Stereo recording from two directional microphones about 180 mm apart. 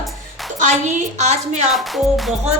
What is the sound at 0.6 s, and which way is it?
A woman's voice, 40° right (ahead or behind).